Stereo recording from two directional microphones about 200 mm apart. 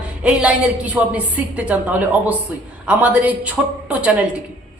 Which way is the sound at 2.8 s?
5° right (ahead or behind).